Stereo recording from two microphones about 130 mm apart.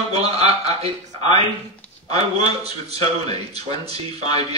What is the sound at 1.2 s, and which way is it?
Speech, 35° left (ahead or behind).